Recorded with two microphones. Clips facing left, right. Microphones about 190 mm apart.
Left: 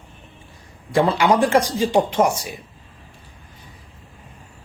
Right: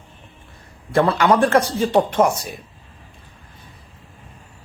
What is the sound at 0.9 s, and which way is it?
Speech, 15° left (ahead or behind).